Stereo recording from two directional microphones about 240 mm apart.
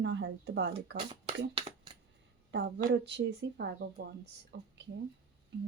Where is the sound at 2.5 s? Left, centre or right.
Right.